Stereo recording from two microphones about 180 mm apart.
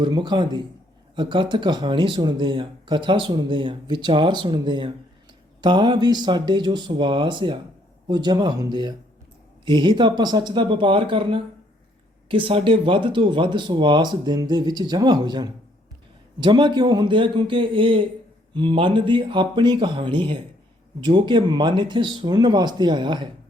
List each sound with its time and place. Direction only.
0.0 s speech: 25° right (ahead or behind)